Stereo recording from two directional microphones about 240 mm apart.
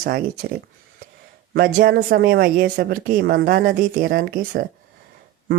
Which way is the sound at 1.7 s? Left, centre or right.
Right.